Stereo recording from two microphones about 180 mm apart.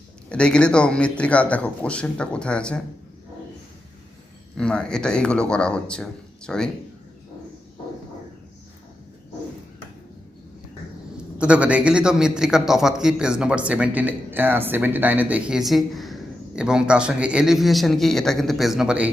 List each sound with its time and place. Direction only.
0.3 s a man's voice: 5° left (ahead or behind)
4.5 s a man's voice: 5° left (ahead or behind)
11.3 s a man's voice: 5° right (ahead or behind)